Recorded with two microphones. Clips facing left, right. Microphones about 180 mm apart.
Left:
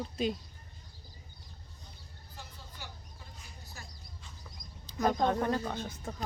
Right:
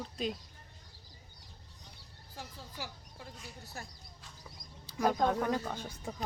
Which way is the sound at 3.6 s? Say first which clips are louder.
Right 4 dB; 60° right (ahead or behind).